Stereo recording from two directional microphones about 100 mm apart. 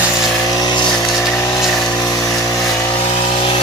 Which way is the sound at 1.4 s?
30° left (ahead or behind).